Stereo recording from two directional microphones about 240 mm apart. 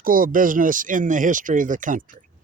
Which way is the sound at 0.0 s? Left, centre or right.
Right.